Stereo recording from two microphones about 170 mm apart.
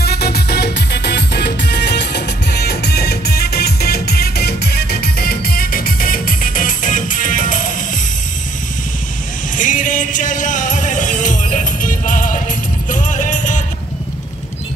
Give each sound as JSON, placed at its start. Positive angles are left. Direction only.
{"t": 0.0, "sound": "music", "side_deg": 65}
{"t": 9.6, "sound": "music", "side_deg": 50}